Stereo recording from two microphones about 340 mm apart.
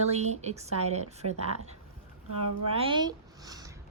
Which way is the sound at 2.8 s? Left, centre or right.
Centre.